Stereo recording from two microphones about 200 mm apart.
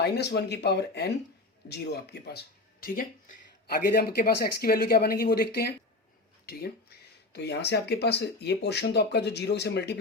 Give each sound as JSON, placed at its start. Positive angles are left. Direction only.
{"t": 0.0, "sound": "speech", "side_deg": 55}
{"t": 6.4, "sound": "a sound", "side_deg": 50}
{"t": 7.3, "sound": "speech", "side_deg": 55}